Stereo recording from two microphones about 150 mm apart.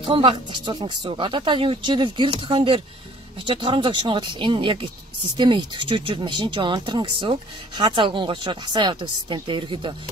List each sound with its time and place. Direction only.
0.0 s speech: 35° right (ahead or behind)